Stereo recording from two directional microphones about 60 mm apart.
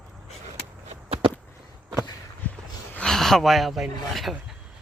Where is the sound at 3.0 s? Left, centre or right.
Centre.